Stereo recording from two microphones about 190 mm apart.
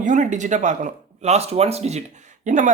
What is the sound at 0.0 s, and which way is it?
Speech, 40° right (ahead or behind).